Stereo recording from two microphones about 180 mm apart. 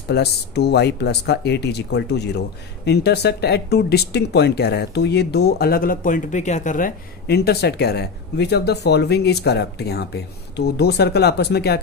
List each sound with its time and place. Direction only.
0.1 s speech: 65° left (ahead or behind)